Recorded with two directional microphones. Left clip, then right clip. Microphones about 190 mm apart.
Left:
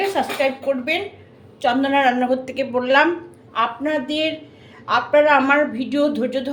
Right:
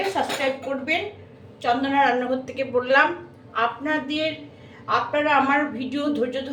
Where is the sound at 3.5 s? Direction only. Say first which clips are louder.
Left 3 dB; 50° left (ahead or behind).